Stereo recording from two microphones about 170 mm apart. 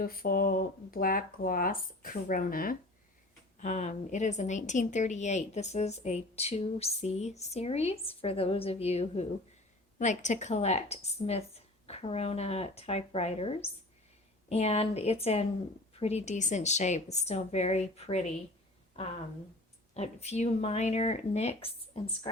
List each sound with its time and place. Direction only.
0.0 s speech: 60° left (ahead or behind)
3.6 s speech: 45° left (ahead or behind)
19.9 s speech: 40° left (ahead or behind)